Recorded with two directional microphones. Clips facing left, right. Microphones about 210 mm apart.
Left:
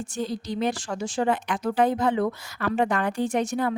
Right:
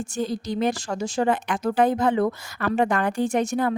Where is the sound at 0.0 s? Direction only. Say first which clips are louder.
Right 3 dB; 45° right (ahead or behind).